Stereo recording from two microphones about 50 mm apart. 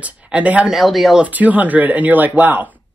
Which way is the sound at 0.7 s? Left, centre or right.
Centre.